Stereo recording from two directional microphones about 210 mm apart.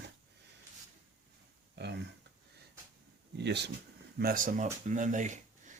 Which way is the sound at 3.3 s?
55° right (ahead or behind).